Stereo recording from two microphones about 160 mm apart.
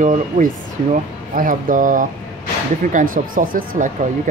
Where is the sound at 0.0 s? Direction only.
50° right (ahead or behind).